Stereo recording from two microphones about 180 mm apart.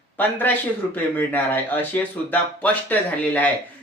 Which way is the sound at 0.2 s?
10° left (ahead or behind).